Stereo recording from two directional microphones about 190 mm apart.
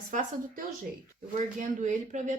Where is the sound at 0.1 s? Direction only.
45° right (ahead or behind).